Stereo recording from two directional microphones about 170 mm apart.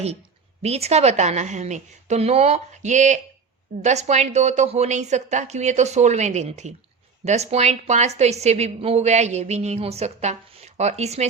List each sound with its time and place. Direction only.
0.6 s a woman's voice: 40° right (ahead or behind)